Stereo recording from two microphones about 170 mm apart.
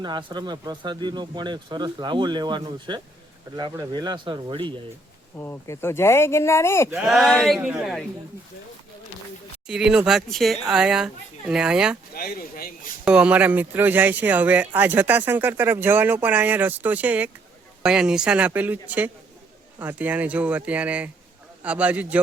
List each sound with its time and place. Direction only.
0.0 s speech: 25° right (ahead or behind)
5.4 s speech: 15° left (ahead or behind)
6.9 s speech: 5° right (ahead or behind)
9.6 s speech: 5° right (ahead or behind)
12.1 s speech: 65° left (ahead or behind)
13.1 s speech: 10° right (ahead or behind)